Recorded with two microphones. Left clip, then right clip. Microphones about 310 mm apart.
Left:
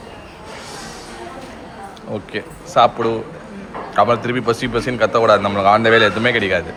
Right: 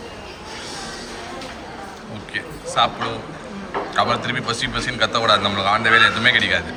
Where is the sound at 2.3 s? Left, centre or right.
Centre.